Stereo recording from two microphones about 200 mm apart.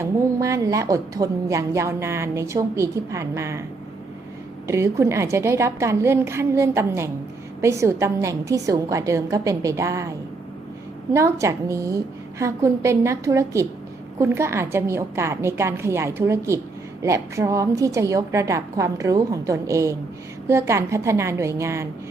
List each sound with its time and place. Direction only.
0.0 s a woman's voice: 15° right (ahead or behind)
4.6 s a woman's voice: 15° right (ahead or behind)